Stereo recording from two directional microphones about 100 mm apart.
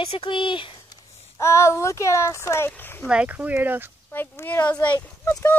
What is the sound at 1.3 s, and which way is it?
Speech, 30° left (ahead or behind).